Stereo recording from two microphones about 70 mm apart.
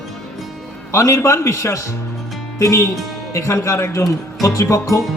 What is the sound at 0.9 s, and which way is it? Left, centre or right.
Speech, left.